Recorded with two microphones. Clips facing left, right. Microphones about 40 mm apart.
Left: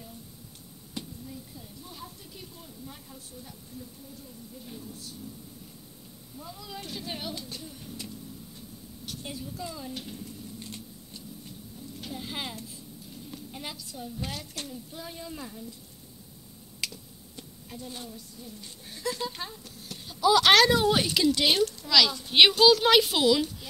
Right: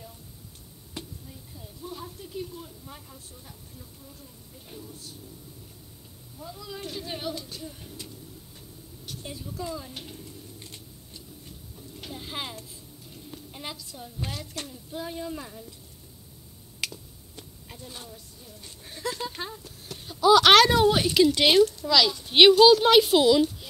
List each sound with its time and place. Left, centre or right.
6.3 s speech: centre
6.8 s speech: right
7.1 s speech: centre
7.3 s speech: left
9.6 s a child's voice: centre
12.2 s a child's voice: centre
16.8 s finger snapping: right
19.2 s speech: centre
19.6 s a sound: right
20.9 s speech: centre
21.3 s speech: right
21.8 s a child's voice: centre
22.6 s a child's voice: right